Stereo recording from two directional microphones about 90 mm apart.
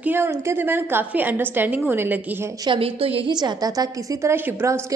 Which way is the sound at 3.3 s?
45° right (ahead or behind).